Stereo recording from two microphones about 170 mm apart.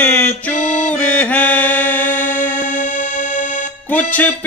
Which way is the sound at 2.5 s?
45° left (ahead or behind).